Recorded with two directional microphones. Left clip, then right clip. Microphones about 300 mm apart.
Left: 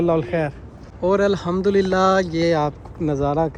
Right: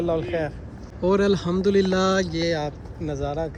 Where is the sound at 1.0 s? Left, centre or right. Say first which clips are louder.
Left 3 dB; centre.